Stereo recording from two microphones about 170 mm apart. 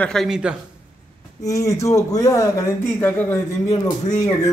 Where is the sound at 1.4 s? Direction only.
20° left (ahead or behind).